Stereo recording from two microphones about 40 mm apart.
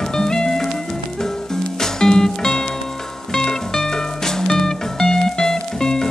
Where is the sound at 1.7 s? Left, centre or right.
Centre.